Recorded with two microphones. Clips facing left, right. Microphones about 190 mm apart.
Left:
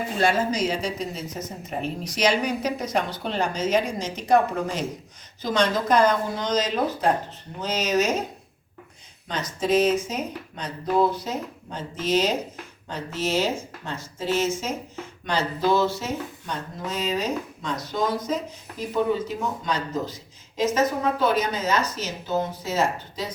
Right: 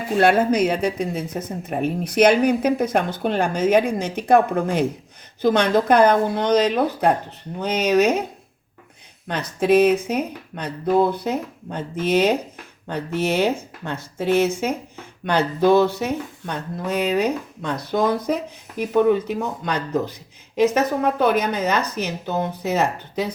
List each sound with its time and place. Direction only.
0.2 s speech: 60° right (ahead or behind)
9.2 s speech: 60° right (ahead or behind)